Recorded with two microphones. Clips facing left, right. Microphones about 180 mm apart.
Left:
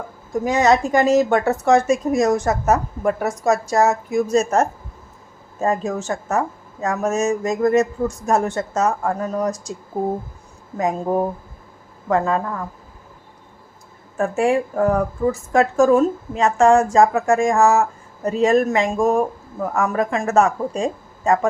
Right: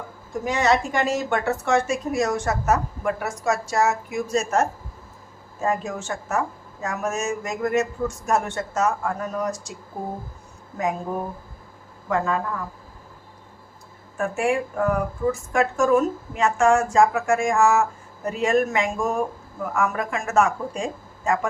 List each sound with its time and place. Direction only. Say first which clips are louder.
0.4 s speech: left 5 dB; 40° left (ahead or behind)
10.8 s speech: left 6 dB; 40° left (ahead or behind)
14.2 s speech: left 5 dB; 35° left (ahead or behind)